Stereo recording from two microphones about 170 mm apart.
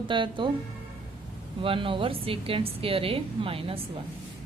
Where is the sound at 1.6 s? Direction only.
30° right (ahead or behind).